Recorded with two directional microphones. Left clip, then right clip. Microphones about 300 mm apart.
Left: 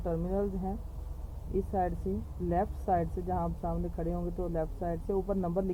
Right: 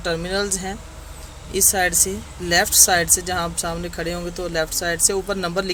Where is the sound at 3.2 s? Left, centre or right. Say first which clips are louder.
Right 10 dB; right.